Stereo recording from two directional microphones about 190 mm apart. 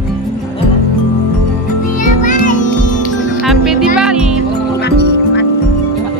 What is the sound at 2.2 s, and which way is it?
Music, 40° left (ahead or behind).